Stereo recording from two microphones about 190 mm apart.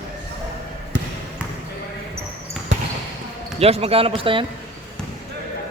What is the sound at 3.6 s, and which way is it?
Speech, 30° right (ahead or behind).